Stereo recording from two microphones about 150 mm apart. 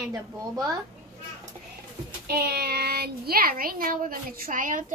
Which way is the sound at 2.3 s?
90° right.